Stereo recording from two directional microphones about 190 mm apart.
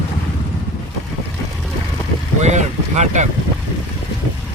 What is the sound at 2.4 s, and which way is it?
Speech, 35° right (ahead or behind).